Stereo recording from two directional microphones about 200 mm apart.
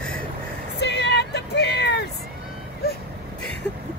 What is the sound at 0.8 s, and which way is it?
Music, 60° left (ahead or behind).